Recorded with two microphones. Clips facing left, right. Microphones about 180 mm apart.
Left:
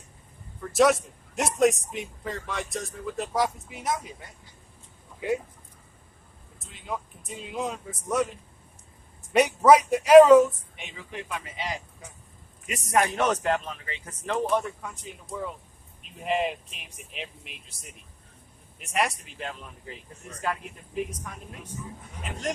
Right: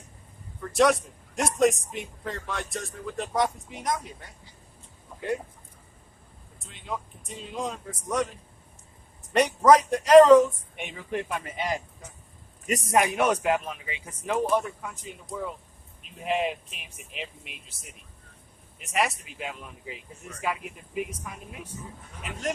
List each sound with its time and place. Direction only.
0.6 s a man's voice: centre (ahead or behind)
6.6 s speech: centre (ahead or behind)
9.3 s speech: 10° left (ahead or behind)
10.8 s speech: 55° right (ahead or behind)
12.9 s a man's voice: 10° right (ahead or behind)